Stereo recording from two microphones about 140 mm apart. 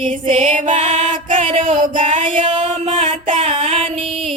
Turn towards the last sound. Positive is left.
turn(degrees=-45)  # may be behind; listen again after turning